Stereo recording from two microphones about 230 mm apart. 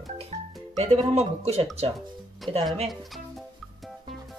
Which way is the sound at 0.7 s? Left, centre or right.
Right.